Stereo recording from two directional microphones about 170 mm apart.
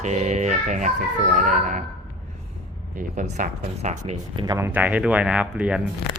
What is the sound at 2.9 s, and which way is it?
Music, 45° right (ahead or behind).